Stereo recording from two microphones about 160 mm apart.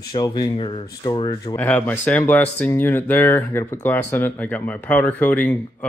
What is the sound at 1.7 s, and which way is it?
Speech, 10° left (ahead or behind).